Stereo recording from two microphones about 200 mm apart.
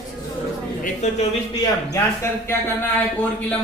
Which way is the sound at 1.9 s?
10° left (ahead or behind).